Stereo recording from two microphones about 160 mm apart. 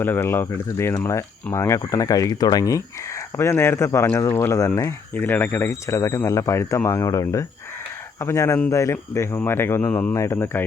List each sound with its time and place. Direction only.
0.0 s speech: 15° left (ahead or behind)